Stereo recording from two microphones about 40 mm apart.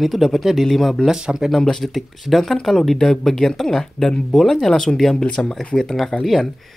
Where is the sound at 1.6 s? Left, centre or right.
Centre.